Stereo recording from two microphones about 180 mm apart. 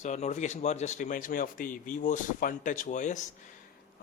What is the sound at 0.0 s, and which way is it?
Speech, 40° left (ahead or behind).